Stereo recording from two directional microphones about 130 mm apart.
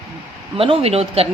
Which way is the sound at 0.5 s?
45° right (ahead or behind).